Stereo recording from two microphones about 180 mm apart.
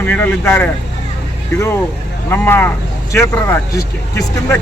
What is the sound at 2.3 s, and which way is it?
Speech, 10° left (ahead or behind).